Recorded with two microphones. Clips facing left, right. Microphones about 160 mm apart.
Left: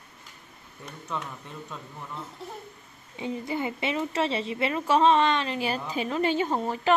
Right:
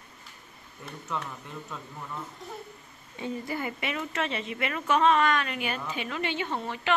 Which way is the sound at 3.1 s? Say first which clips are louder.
Left 2 dB; 15° left (ahead or behind).